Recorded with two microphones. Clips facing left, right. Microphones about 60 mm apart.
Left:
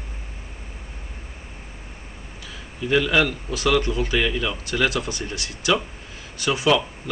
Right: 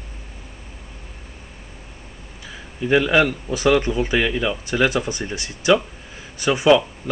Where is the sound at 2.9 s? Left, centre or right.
Right.